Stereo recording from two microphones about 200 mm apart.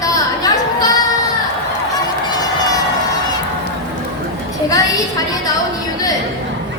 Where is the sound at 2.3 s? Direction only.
20° left (ahead or behind).